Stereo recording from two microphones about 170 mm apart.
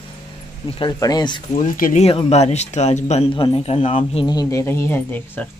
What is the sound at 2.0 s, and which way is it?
Speech, 40° left (ahead or behind).